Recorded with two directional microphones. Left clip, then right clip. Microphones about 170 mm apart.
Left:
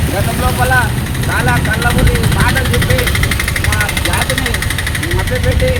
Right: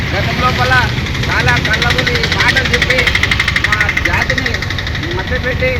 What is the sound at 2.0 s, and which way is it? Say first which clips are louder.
Speech: right 3 dB; 55° left (ahead or behind).